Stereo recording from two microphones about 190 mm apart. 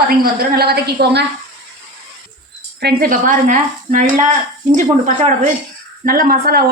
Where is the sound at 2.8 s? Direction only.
45° right (ahead or behind).